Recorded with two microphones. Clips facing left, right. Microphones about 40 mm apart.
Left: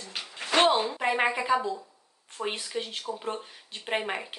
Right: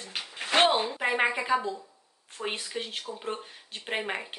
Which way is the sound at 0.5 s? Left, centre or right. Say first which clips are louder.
Left 1 dB; right.